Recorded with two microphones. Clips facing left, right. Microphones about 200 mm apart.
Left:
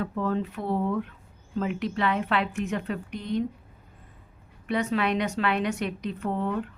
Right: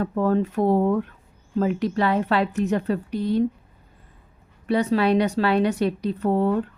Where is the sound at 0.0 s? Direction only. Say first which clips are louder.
Right 6 dB; 45° right (ahead or behind).